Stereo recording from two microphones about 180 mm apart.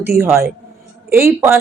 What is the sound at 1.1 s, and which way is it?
Speech, 15° right (ahead or behind).